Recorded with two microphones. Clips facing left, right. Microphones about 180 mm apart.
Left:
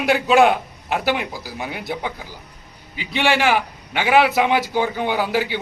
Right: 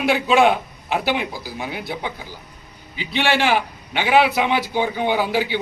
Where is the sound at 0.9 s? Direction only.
5° left (ahead or behind).